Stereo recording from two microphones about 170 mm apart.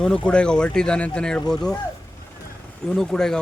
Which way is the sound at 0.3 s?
5° left (ahead or behind).